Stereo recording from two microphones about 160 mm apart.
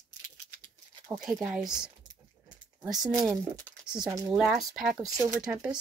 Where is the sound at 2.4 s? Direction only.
5° right (ahead or behind).